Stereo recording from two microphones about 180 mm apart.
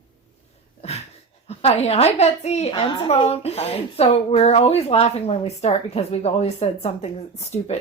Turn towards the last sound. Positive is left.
turn(degrees=35)  # may be behind; listen again after turning